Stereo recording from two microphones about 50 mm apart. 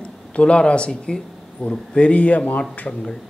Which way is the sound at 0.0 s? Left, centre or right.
Left.